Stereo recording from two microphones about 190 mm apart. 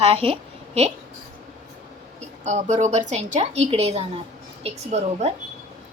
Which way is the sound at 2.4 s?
40° right (ahead or behind).